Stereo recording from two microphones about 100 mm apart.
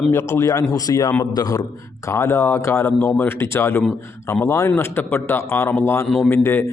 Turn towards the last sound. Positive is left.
turn(degrees=25)  # may be behind; listen again after turning